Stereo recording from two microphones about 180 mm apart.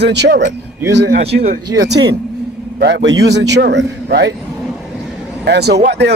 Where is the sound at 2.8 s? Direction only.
75° right (ahead or behind).